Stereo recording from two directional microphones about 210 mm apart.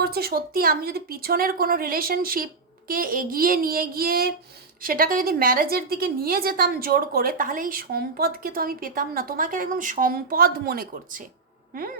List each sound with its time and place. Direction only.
0.0 s a woman's voice: 45° right (ahead or behind)